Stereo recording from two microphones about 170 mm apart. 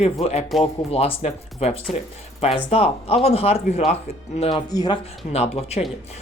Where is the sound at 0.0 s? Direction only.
35° left (ahead or behind).